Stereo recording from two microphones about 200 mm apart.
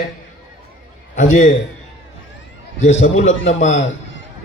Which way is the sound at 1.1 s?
35° left (ahead or behind).